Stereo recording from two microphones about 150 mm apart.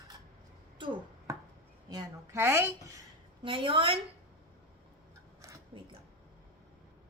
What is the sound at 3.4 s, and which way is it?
Speech, 35° right (ahead or behind).